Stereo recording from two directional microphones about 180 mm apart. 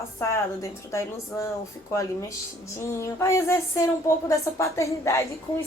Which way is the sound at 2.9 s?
15° left (ahead or behind).